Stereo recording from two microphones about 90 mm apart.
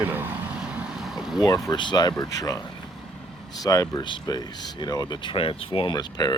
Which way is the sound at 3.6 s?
45° left (ahead or behind).